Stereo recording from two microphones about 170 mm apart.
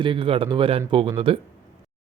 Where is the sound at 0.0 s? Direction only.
30° right (ahead or behind).